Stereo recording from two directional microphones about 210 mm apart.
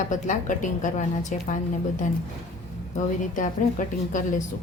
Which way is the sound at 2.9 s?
40° left (ahead or behind).